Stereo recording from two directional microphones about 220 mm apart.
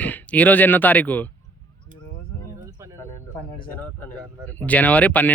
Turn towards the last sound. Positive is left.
turn(degrees=5)  # may be behind; listen again after turning